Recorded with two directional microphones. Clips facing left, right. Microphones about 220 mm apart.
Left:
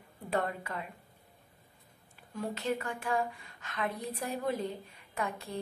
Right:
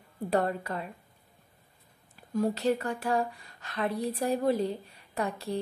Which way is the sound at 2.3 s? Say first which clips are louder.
Right 7 dB; 35° right (ahead or behind).